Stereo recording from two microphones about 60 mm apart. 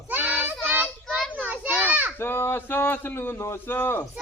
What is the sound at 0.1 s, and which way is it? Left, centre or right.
Child singing, right.